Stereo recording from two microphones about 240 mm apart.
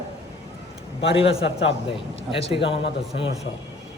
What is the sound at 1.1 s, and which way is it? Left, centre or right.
A man's voice, left.